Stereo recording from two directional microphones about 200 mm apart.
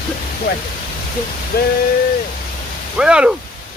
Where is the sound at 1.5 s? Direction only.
50° left (ahead or behind).